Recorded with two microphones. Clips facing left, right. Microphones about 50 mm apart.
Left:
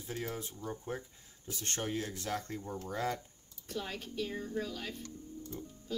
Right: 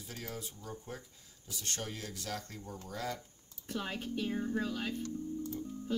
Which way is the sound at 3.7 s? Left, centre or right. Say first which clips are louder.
Right 2 dB; right.